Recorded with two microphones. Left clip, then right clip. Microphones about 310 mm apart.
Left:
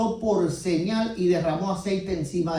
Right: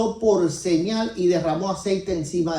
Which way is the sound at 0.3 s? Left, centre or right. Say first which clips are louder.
Right 6 dB; right.